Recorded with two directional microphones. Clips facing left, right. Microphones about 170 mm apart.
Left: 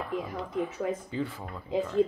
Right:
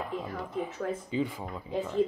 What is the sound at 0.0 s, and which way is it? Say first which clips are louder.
Speech: left 2 dB; 15° right (ahead or behind).